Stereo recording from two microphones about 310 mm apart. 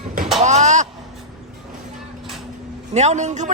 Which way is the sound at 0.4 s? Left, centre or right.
Right.